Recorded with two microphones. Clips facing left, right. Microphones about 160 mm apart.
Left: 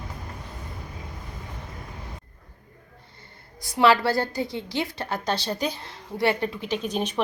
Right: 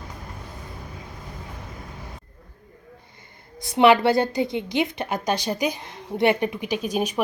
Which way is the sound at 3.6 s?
20° right (ahead or behind).